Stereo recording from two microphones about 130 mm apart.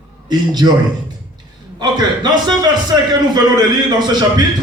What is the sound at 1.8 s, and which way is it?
A man's voice, 35° right (ahead or behind).